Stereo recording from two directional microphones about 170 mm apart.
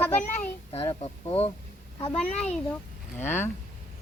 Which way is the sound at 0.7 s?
35° left (ahead or behind).